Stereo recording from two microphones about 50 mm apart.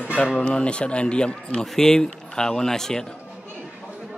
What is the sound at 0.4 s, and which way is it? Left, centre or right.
Speech, left.